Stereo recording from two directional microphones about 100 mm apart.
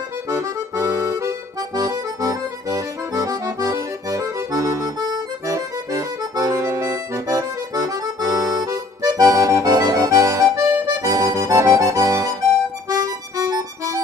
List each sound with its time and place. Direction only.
0.3 s accordion: 30° right (ahead or behind)
12.9 s music: 40° right (ahead or behind)